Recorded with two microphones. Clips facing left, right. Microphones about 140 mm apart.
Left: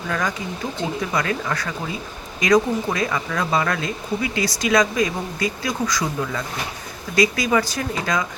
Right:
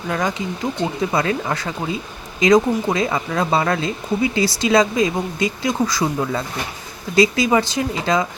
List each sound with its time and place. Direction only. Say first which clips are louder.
0.1 s speech: right 3 dB; 25° right (ahead or behind)